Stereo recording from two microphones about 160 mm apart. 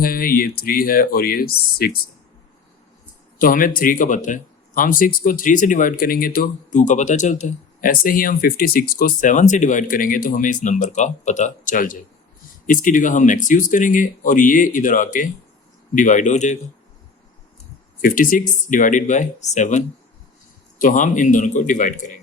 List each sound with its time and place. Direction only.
0.0 s speech: 65° left (ahead or behind)
3.3 s speech: 60° left (ahead or behind)
18.0 s speech: 60° left (ahead or behind)